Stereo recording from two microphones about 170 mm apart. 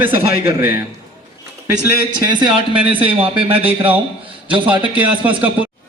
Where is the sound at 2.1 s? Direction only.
30° right (ahead or behind).